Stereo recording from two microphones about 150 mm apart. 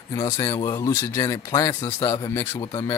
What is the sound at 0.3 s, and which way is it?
Speech, 20° left (ahead or behind).